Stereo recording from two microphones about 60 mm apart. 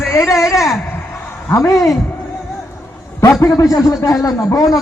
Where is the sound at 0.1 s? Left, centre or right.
Left.